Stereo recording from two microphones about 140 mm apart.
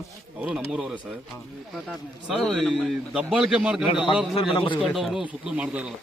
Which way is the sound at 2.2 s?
Centre (ahead or behind).